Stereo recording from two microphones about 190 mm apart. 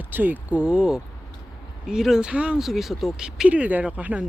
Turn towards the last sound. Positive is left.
turn(degrees=-5)  # may be behind; listen again after turning